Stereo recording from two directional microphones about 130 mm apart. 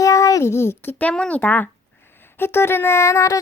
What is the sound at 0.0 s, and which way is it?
A child's voice, 25° left (ahead or behind).